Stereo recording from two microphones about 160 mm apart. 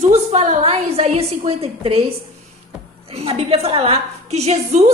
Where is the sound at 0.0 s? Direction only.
45° right (ahead or behind).